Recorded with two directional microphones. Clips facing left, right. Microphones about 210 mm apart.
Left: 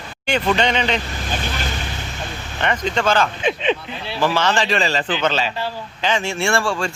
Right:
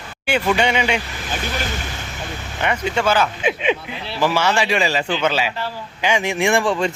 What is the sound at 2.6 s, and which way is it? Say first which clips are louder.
Speech: even; 10° right (ahead or behind).